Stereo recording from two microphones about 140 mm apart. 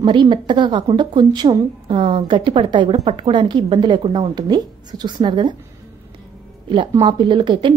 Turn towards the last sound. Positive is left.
turn(degrees=-35)  # may be behind; listen again after turning